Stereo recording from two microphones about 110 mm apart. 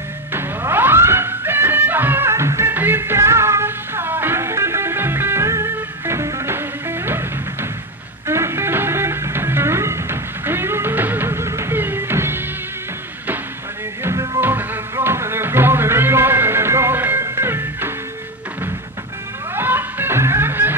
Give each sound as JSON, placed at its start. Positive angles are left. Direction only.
{"t": 0.3, "sound": "music", "side_deg": -20}
{"t": 8.3, "sound": "music", "side_deg": -25}
{"t": 14.0, "sound": "music", "side_deg": -25}
{"t": 19.5, "sound": "music", "side_deg": -20}